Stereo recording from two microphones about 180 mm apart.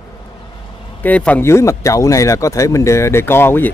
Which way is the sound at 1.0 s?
10° left (ahead or behind).